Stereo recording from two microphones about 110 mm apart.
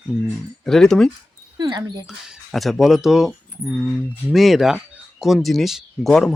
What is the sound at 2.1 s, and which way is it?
Speech, centre (ahead or behind).